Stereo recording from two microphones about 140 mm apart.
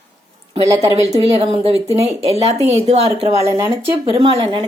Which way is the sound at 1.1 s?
40° right (ahead or behind).